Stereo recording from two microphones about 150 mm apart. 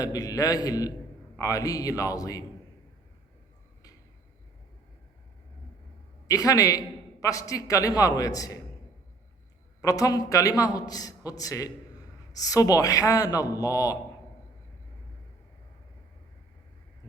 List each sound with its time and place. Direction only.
0.0 s a man's voice: 25° left (ahead or behind)
6.2 s a man's voice: 25° left (ahead or behind)
9.8 s a man's voice: 25° left (ahead or behind)